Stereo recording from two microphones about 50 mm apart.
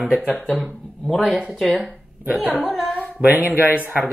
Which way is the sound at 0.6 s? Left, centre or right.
Centre.